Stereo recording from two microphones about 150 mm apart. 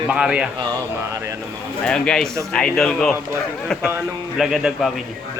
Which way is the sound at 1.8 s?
5° left (ahead or behind).